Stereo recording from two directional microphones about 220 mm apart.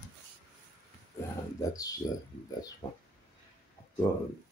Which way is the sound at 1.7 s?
15° left (ahead or behind).